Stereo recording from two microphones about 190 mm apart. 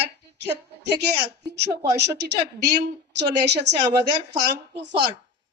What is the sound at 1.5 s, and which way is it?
Speech, 60° right (ahead or behind).